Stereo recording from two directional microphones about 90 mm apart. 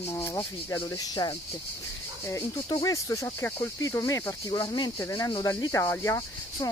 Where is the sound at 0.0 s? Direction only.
30° left (ahead or behind); by 1.3 s 45° left (ahead or behind).